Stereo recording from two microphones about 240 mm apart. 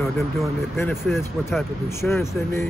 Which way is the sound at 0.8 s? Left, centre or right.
Centre.